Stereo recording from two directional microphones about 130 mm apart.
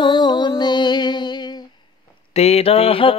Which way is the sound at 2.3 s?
55° left (ahead or behind).